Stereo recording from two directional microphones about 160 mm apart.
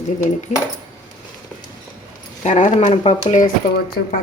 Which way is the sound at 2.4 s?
50° left (ahead or behind).